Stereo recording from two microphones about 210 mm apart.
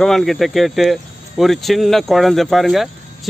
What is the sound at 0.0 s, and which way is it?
Speech, centre (ahead or behind).